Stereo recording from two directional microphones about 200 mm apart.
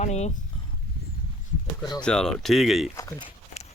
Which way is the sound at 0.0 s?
35° left (ahead or behind).